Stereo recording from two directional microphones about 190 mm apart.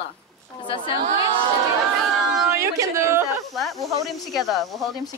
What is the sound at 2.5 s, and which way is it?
Speech, 15° right (ahead or behind).